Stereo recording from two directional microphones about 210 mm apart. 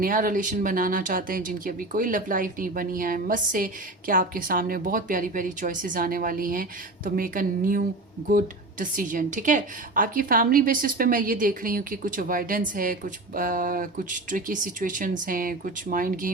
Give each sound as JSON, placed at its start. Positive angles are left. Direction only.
{"t": 0.0, "sound": "a woman's voice", "side_deg": -40}